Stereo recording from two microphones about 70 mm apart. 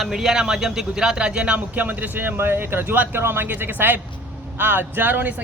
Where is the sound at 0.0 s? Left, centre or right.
Centre.